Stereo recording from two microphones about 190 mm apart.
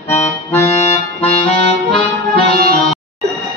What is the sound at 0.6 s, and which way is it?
Accordion, 10° left (ahead or behind).